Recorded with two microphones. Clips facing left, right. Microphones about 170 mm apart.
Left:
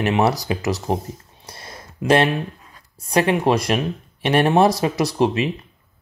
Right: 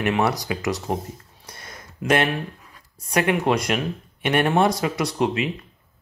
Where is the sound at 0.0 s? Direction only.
25° left (ahead or behind).